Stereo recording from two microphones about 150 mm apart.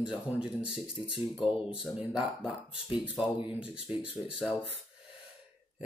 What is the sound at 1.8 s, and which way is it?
Speech, centre (ahead or behind).